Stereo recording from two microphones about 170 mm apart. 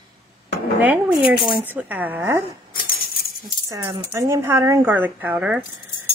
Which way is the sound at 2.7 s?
55° left (ahead or behind).